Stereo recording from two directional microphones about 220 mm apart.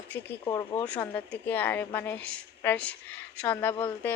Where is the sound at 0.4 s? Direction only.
15° left (ahead or behind).